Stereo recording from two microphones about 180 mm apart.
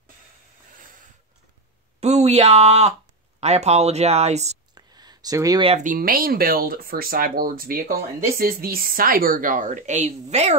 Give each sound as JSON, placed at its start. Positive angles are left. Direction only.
{"t": 2.0, "sound": "speech", "side_deg": -35}
{"t": 4.7, "sound": "a sound", "side_deg": -20}
{"t": 5.6, "sound": "speech", "side_deg": -35}
{"t": 5.9, "sound": "a woman's voice", "side_deg": -55}